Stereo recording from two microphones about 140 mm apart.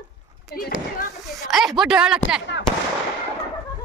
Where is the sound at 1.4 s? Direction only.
Centre (ahead or behind).